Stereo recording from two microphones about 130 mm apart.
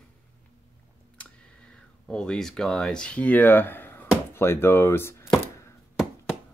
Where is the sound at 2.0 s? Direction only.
5° left (ahead or behind).